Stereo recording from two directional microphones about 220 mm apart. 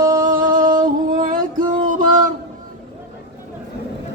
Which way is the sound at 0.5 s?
20° right (ahead or behind).